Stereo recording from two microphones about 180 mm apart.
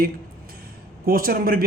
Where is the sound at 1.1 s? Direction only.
55° right (ahead or behind).